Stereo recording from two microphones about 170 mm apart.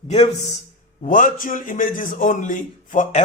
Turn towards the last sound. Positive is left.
turn(degrees=45)  # may be behind; listen again after turning